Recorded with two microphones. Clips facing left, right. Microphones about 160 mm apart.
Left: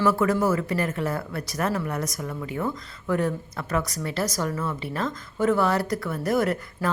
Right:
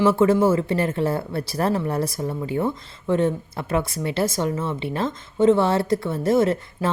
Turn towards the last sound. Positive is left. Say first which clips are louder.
# right 4 dB
turn(degrees=-25)  # may be behind; listen again after turning